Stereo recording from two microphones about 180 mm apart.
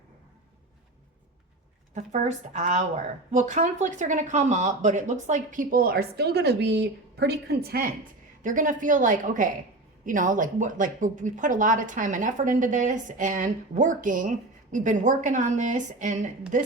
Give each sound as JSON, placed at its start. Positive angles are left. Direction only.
{"t": 2.0, "sound": "speech", "side_deg": -40}
{"t": 8.4, "sound": "speech", "side_deg": -45}